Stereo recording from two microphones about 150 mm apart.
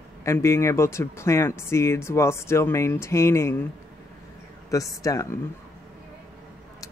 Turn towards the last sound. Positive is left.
turn(degrees=20)  # may be behind; listen again after turning